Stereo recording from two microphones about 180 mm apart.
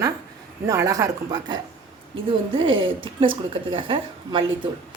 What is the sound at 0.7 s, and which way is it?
Speech, 15° right (ahead or behind).